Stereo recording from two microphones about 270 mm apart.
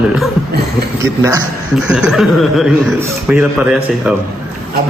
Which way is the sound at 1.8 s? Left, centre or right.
Centre.